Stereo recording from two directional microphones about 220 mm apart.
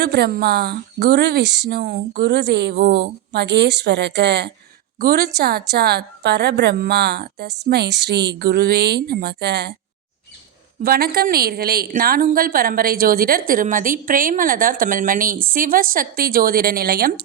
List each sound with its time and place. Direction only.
0.0 s a woman's voice: 45° right (ahead or behind)
10.8 s a woman's voice: 45° right (ahead or behind)